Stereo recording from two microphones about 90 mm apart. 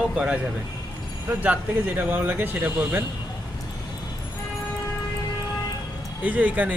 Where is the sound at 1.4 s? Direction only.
20° right (ahead or behind).